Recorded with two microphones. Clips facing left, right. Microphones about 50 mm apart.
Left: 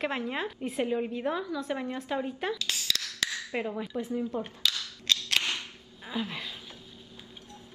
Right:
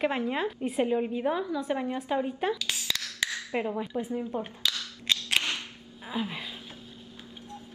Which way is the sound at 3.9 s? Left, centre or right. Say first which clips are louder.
Even; centre.